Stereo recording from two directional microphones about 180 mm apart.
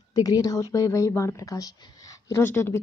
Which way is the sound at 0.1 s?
20° left (ahead or behind).